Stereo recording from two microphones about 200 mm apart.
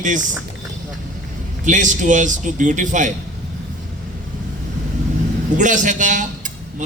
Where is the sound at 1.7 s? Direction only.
40° right (ahead or behind).